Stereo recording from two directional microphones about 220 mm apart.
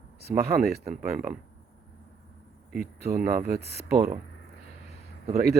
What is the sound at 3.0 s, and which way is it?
Speech, 40° right (ahead or behind).